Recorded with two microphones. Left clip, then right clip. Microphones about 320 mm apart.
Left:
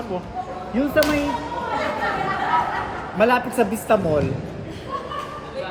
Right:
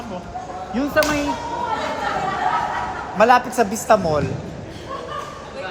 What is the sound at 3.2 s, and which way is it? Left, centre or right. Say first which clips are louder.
Speech: right 4 dB; centre.